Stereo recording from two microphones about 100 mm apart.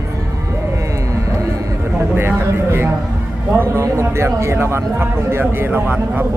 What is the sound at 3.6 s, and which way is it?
Speech, 25° right (ahead or behind).